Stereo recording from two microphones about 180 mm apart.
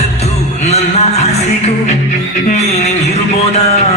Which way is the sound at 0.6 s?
35° left (ahead or behind).